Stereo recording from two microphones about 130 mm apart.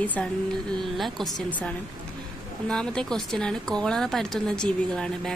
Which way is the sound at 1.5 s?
10° left (ahead or behind).